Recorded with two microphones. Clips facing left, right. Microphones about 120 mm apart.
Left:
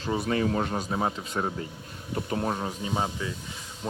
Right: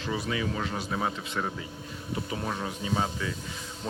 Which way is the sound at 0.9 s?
25° left (ahead or behind).